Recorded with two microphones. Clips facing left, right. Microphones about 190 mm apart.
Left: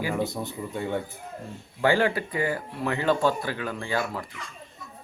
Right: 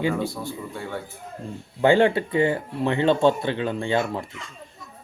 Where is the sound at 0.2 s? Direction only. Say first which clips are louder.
Right 1 dB; 20° left (ahead or behind).